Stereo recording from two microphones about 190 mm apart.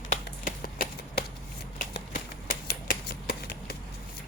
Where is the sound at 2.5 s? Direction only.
55° left (ahead or behind).